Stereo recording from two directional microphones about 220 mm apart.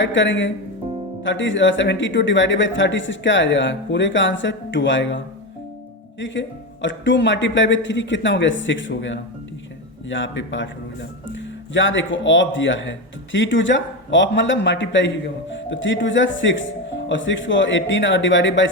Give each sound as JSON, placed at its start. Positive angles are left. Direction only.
{"t": 0.0, "sound": "speech", "side_deg": 55}